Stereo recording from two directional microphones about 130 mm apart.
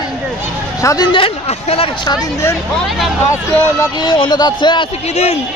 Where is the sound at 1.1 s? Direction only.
45° left (ahead or behind).